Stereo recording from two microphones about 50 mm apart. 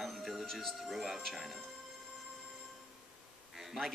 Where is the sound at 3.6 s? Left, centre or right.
Centre.